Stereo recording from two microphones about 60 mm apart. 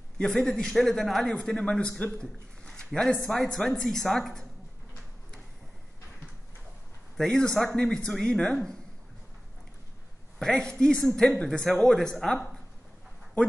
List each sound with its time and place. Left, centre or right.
0.2 s speech: centre
1.3 s speech: centre
7.2 s speech: centre
10.4 s speech: centre